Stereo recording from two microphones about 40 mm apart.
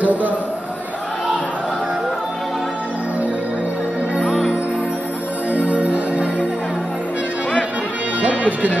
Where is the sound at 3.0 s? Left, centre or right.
Right.